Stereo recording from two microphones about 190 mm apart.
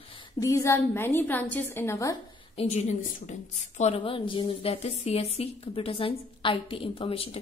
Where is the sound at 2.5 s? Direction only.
35° left (ahead or behind).